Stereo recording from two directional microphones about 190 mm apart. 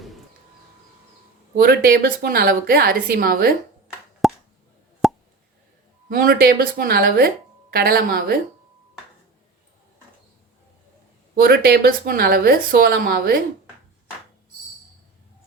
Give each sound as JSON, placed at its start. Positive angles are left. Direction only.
{"t": 1.5, "sound": "a woman's voice", "side_deg": -50}
{"t": 4.2, "sound": "plop", "side_deg": 0}
{"t": 6.1, "sound": "a woman's voice", "side_deg": -50}
{"t": 11.3, "sound": "a woman's voice", "side_deg": -50}